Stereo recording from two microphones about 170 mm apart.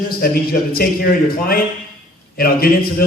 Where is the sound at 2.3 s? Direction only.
60° left (ahead or behind).